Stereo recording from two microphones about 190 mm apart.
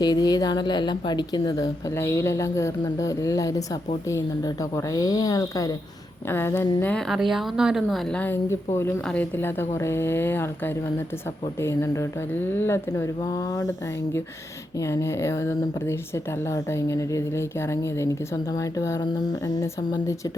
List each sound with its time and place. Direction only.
0.0 s a woman's voice: 20° left (ahead or behind)
4.9 s a woman's voice: 20° left (ahead or behind)
11.6 s a woman's voice: 15° left (ahead or behind)
14.8 s a woman's voice: 15° left (ahead or behind)